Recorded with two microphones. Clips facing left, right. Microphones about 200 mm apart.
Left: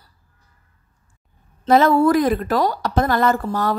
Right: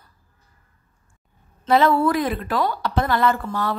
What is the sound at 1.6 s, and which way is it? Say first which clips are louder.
A woman's voice: left 3 dB; 45° left (ahead or behind).